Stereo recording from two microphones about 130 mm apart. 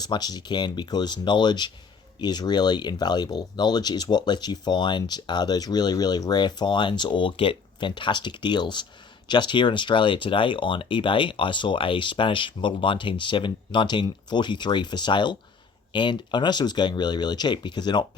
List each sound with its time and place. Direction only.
0.0 s speech: 30° left (ahead or behind)